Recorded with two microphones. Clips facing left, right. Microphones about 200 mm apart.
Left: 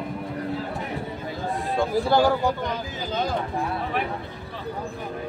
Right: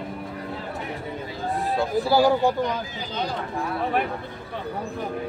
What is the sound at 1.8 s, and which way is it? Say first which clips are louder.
Speech: even; 5° right (ahead or behind).